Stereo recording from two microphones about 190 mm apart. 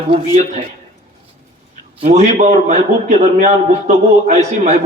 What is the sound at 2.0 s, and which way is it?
A man's voice, 35° right (ahead or behind).